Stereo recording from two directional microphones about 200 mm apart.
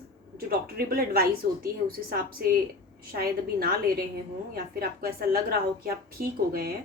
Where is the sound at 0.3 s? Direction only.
50° right (ahead or behind).